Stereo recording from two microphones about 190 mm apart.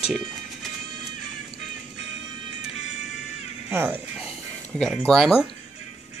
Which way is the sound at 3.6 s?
10° right (ahead or behind).